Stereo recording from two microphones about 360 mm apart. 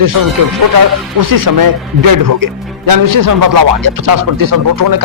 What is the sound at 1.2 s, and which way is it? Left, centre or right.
Speech, right.